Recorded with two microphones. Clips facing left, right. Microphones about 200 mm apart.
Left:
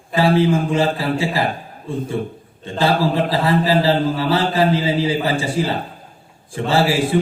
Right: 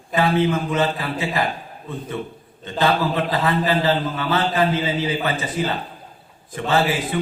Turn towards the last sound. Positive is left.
turn(degrees=30)  # may be behind; listen again after turning